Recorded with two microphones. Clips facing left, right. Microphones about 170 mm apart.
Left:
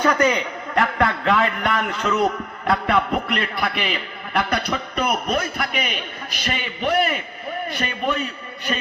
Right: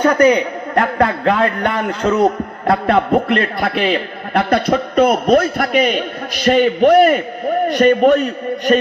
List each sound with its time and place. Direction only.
0.0 s a man's voice: 30° right (ahead or behind); by 3.8 s 45° right (ahead or behind)
4.4 s a man's voice: 55° right (ahead or behind)
4.9 s a man's voice: 30° right (ahead or behind)
5.3 s a man's voice: 50° right (ahead or behind)